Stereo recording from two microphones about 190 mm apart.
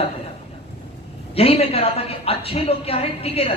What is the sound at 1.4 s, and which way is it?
A woman's voice, 30° left (ahead or behind).